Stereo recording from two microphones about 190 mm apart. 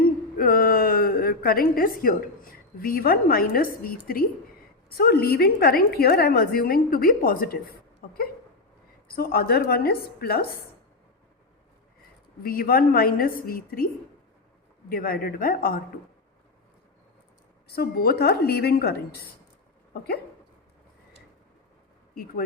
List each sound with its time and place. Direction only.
0.3 s a woman's voice: 50° left (ahead or behind)
12.4 s a woman's voice: 50° left (ahead or behind)
17.7 s a woman's voice: 55° left (ahead or behind)
22.1 s speech: 50° left (ahead or behind)